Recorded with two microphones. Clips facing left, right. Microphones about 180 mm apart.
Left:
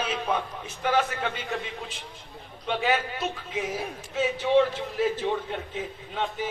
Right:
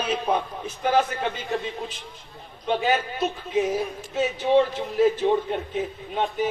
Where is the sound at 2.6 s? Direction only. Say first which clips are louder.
Right 3 dB; 30° right (ahead or behind).